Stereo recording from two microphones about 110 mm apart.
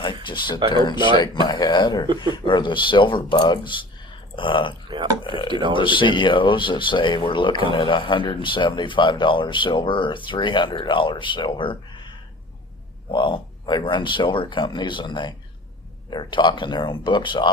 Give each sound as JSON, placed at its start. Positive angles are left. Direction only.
{"t": 0.0, "sound": "speech", "side_deg": 45}
{"t": 4.9, "sound": "speech", "side_deg": -45}
{"t": 5.2, "sound": "speech", "side_deg": 50}
{"t": 5.5, "sound": "speech", "side_deg": -45}
{"t": 5.7, "sound": "speech", "side_deg": 50}